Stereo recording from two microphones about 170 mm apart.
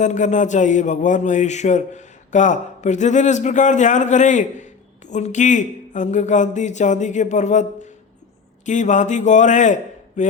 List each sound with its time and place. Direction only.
0.0 s speech: 45° left (ahead or behind)